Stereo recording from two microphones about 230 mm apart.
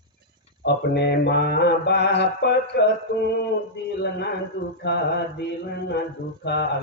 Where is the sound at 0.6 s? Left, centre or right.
Left.